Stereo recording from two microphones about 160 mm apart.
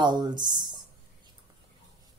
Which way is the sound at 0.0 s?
25° right (ahead or behind).